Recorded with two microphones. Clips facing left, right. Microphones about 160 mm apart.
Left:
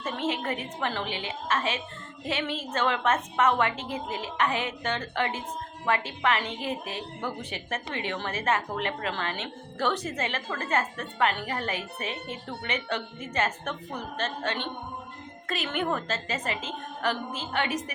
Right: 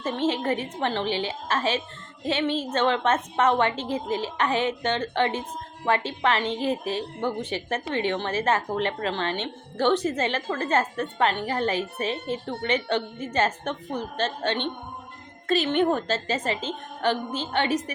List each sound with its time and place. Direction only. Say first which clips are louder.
0.0 s a woman's voice: right 5 dB; 30° right (ahead or behind)